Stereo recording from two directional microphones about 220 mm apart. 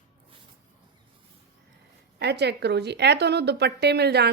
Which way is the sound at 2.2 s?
50° right (ahead or behind).